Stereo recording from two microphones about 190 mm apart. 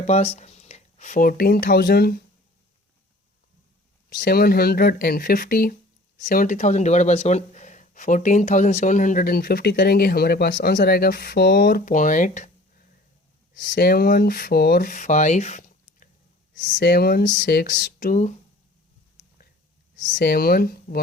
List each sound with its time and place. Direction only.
0.1 s speech: 35° left (ahead or behind); by 2.1 s 55° left (ahead or behind)
4.2 s speech: 50° left (ahead or behind)
20.0 s speech: 45° left (ahead or behind)